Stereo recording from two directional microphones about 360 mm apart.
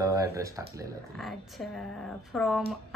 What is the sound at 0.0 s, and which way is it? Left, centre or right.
Speech, centre.